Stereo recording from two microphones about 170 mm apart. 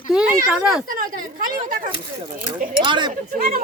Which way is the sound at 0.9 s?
55° right (ahead or behind).